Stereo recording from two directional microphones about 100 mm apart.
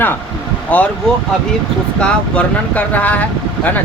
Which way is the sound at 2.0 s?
15° left (ahead or behind).